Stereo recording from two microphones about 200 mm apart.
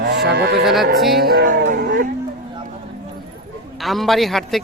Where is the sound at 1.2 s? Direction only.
50° right (ahead or behind).